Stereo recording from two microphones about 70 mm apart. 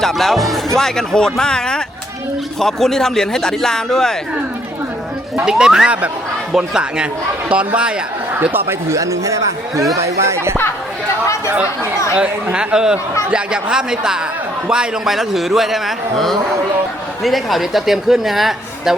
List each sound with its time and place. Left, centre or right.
0.0 s a man's voice: centre
5.4 s speech: centre
8.9 s speech: right
12.1 s a man's voice: centre